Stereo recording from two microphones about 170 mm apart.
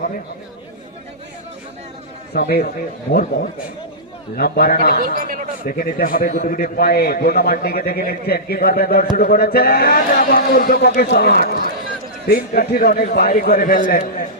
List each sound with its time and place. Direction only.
2.3 s a man's voice: 65° left (ahead or behind)
4.9 s a man's voice: 60° right (ahead or behind)
5.6 s a man's voice: 60° left (ahead or behind)